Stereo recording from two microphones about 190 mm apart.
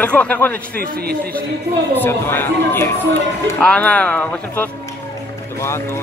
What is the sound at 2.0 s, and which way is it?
Speech, 10° left (ahead or behind).